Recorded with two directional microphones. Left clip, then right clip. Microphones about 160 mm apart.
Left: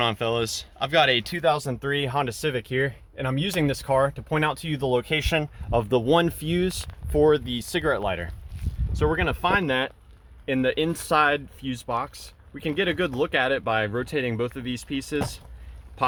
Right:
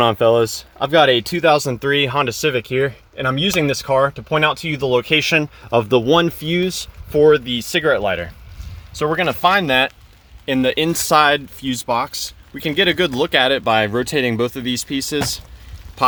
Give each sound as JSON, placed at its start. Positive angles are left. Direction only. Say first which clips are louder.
{"t": 0.0, "sound": "speech", "louder": "right 11 dB", "side_deg": -50}
{"t": 6.1, "sound": "speech", "louder": "right 6 dB", "side_deg": -10}
{"t": 8.9, "sound": "speech", "louder": "right 6 dB", "side_deg": -30}